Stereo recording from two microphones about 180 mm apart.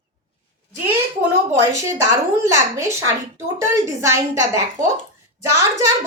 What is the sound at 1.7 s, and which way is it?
A woman's voice, 15° right (ahead or behind).